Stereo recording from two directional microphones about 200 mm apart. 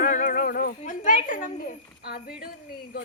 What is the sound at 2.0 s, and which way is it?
Speech, 50° left (ahead or behind).